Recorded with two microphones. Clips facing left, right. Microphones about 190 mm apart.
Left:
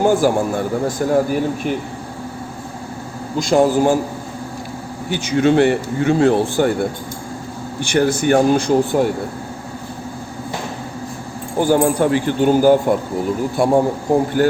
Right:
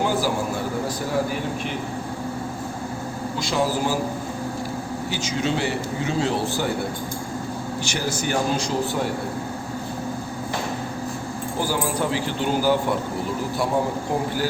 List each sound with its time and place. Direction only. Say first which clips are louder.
0.0 s a man's voice: left 8 dB; 50° left (ahead or behind)
3.3 s speech: left 10 dB; 50° left (ahead or behind)
5.1 s a man's voice: left 11 dB; 60° left (ahead or behind)
7.9 s a man's voice: left 12 dB; 55° left (ahead or behind)
11.6 s speech: left 10 dB; 55° left (ahead or behind)